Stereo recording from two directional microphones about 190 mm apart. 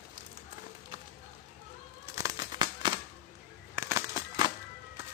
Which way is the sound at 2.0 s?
15° right (ahead or behind).